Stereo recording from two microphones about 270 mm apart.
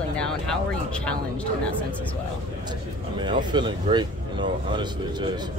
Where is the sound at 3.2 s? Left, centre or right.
Centre.